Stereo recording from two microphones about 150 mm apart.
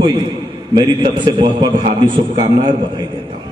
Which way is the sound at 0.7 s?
30° right (ahead or behind).